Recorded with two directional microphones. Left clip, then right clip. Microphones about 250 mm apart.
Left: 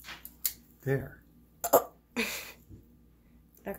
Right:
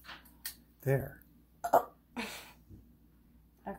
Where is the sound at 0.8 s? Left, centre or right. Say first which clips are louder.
Even; centre.